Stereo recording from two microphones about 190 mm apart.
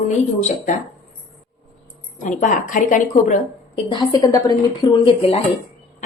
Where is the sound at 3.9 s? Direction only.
20° left (ahead or behind).